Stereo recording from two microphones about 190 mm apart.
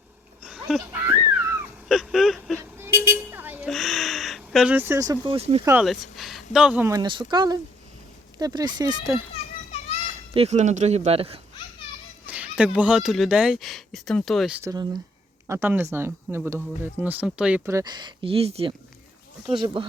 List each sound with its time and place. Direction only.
0.4 s a sound: centre (ahead or behind)
2.7 s vehicle: 10° right (ahead or behind); by 5.6 s 30° right (ahead or behind)
5.8 s speech: centre (ahead or behind)
6.9 s speech: 25° right (ahead or behind)
10.3 s speech: 35° right (ahead or behind)
12.2 s speech: 5° right (ahead or behind)
14.6 s speech: 20° right (ahead or behind)